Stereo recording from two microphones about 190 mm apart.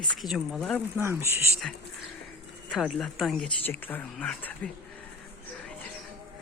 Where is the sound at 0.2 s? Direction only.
Centre (ahead or behind).